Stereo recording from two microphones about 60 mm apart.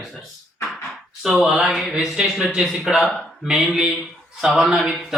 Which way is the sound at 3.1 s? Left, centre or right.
Centre.